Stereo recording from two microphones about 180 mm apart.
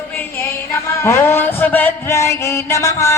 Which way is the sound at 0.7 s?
15° left (ahead or behind).